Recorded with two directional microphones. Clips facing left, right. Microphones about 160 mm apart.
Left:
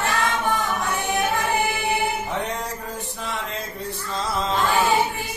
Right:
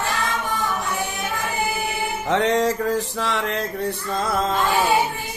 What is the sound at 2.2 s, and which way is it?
Music, 90° right.